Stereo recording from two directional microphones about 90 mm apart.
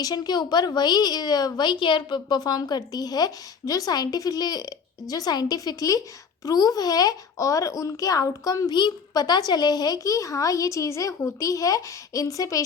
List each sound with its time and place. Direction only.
0.0 s a woman's voice: 45° left (ahead or behind)